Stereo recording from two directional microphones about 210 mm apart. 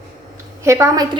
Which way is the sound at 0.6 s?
15° right (ahead or behind).